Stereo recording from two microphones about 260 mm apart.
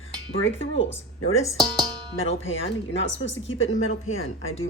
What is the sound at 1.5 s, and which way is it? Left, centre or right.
Speech, centre.